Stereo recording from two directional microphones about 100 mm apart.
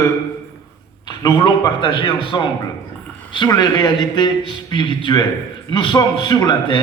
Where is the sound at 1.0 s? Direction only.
50° left (ahead or behind).